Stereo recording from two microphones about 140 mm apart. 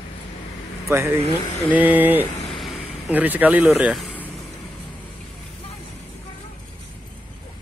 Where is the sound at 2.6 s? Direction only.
10° right (ahead or behind).